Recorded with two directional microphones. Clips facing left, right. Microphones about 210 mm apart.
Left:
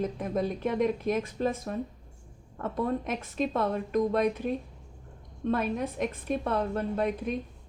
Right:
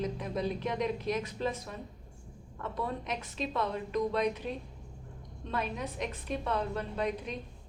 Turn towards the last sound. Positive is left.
turn(degrees=50)  # may be behind; listen again after turning